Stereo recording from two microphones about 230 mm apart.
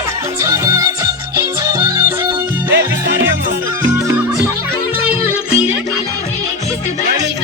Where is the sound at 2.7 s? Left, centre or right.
Right.